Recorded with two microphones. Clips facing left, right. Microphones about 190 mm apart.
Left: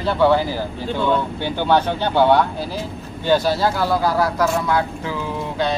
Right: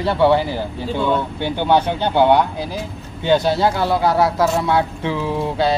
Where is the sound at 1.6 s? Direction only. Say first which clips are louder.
Right 1 dB; 15° right (ahead or behind).